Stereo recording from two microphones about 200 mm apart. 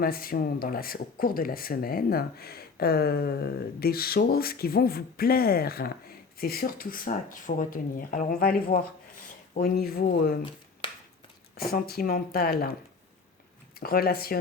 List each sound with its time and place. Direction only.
0.0 s speech: 45° left (ahead or behind)
11.7 s speech: 50° left (ahead or behind)
13.7 s speech: 50° left (ahead or behind)